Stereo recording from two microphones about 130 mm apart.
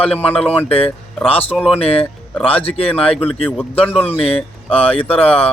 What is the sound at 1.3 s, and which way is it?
Speech, 45° left (ahead or behind).